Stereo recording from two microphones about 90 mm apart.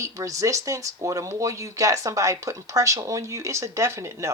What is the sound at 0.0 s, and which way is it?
Speech, 40° right (ahead or behind).